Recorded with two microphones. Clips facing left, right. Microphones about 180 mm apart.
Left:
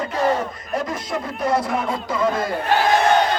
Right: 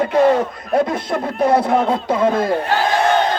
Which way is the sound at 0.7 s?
60° right (ahead or behind).